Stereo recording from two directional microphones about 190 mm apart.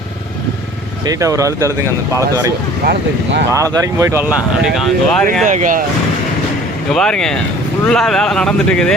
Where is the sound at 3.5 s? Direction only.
15° right (ahead or behind).